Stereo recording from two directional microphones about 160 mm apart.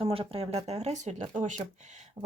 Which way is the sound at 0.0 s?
35° right (ahead or behind).